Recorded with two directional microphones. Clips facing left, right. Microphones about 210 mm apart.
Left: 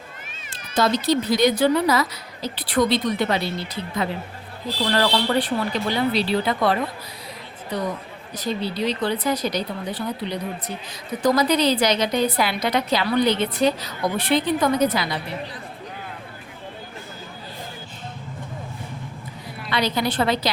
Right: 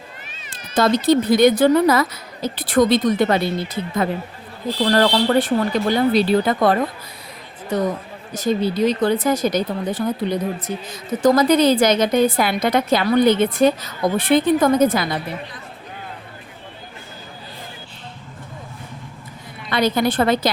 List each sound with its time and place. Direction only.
0.7 s a woman's voice: 55° right (ahead or behind)
19.7 s a woman's voice: 50° right (ahead or behind)